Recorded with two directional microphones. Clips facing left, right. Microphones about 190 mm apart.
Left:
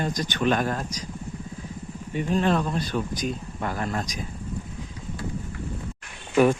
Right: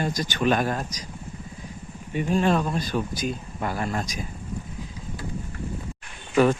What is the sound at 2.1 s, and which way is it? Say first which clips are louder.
Speech: right 1 dB; 10° right (ahead or behind).